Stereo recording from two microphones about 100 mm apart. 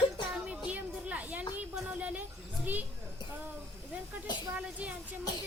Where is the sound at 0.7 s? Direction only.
15° right (ahead or behind).